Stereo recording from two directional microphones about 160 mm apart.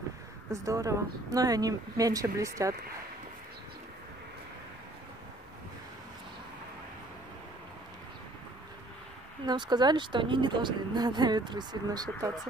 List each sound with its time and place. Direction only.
0.5 s speech: 20° right (ahead or behind)
9.5 s speech: 25° right (ahead or behind)